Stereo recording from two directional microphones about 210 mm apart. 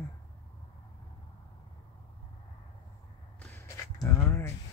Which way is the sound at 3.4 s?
10° left (ahead or behind).